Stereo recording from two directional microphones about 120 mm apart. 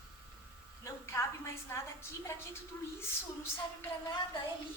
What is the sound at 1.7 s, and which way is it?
Speech, 20° left (ahead or behind).